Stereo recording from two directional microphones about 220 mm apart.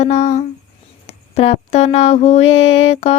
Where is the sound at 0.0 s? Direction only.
30° left (ahead or behind).